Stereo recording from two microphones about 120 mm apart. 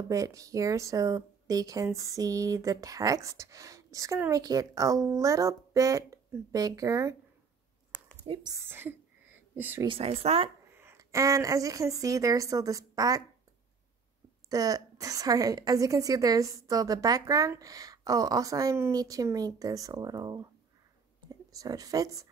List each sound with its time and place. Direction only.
0.1 s a woman's voice: 25° right (ahead or behind)
8.3 s a woman's voice: 40° right (ahead or behind)
8.5 s a sound: 20° right (ahead or behind)
9.8 s speech: 55° right (ahead or behind)
10.7 s speech: 20° right (ahead or behind)
14.5 s a woman's voice: 30° right (ahead or behind)